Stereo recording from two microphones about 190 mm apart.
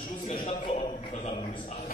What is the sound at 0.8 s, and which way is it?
A man's voice, 30° left (ahead or behind).